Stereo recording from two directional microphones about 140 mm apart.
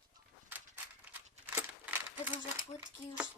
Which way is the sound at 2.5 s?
10° right (ahead or behind).